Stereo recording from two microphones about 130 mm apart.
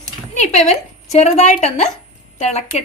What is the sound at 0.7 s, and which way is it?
A woman's voice, 55° left (ahead or behind).